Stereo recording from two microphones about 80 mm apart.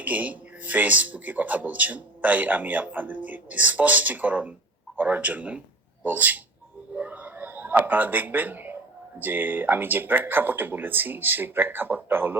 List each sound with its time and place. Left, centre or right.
0.0 s a man's voice: centre
6.9 s a sound: centre
9.1 s speech: right